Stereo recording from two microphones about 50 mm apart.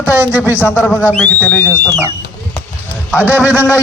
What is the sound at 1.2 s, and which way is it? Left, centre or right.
Speech, left.